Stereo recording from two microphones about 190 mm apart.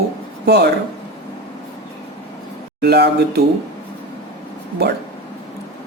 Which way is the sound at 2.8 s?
60° right (ahead or behind).